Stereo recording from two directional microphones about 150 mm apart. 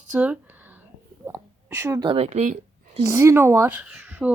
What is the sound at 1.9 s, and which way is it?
Speech, 30° right (ahead or behind).